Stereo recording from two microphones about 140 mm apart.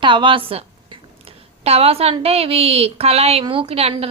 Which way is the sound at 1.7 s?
45° right (ahead or behind).